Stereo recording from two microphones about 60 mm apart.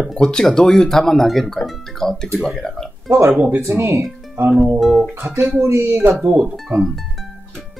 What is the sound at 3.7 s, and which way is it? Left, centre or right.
Speech, right.